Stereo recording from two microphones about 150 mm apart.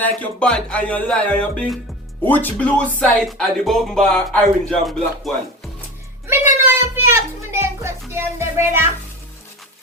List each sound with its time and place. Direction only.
0.0 s speech: 10° left (ahead or behind)
6.7 s music: 15° right (ahead or behind)